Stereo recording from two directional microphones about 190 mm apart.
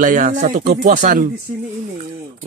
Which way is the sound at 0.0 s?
45° right (ahead or behind).